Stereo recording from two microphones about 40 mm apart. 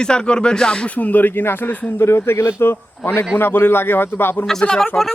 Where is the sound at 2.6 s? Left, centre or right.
Left.